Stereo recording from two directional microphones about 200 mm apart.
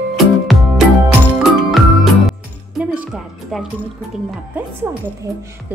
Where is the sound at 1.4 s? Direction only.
Centre (ahead or behind).